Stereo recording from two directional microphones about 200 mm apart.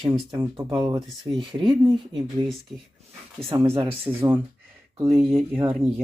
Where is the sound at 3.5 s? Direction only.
20° right (ahead or behind).